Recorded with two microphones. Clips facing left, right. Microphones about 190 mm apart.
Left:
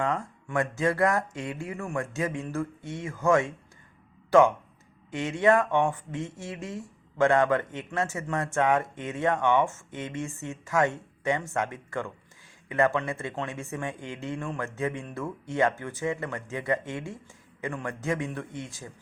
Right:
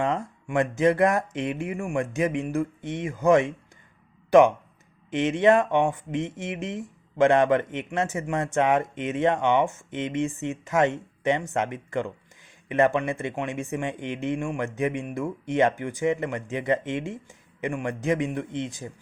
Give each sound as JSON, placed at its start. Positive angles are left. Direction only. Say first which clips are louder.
{"t": 0.0, "sound": "speech", "louder": "right 3 dB", "side_deg": -20}